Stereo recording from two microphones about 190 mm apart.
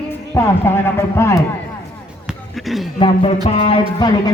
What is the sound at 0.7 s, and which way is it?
Speech, 10° left (ahead or behind).